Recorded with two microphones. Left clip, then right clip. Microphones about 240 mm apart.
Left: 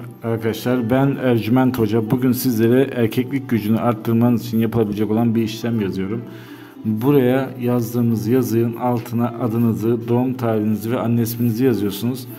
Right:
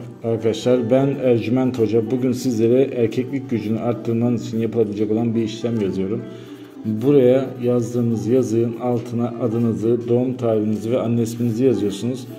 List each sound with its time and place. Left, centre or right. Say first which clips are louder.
0.3 s a man's voice: right 3 dB; centre